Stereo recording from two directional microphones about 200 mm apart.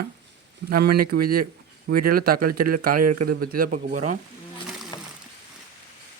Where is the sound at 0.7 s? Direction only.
50° right (ahead or behind).